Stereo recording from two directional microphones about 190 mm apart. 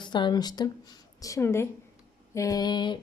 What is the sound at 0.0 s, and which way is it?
A woman's voice, 25° left (ahead or behind).